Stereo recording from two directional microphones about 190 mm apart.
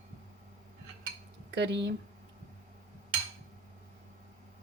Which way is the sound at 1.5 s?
65° right (ahead or behind).